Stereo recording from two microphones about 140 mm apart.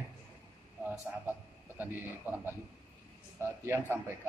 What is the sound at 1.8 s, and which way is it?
Speech, 15° right (ahead or behind).